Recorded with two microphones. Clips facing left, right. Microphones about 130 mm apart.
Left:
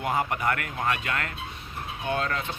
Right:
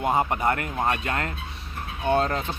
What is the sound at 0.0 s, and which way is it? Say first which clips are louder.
Speech: right 4 dB; 25° right (ahead or behind).